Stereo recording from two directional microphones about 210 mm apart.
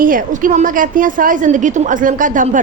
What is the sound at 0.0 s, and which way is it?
A woman's voice, 40° right (ahead or behind).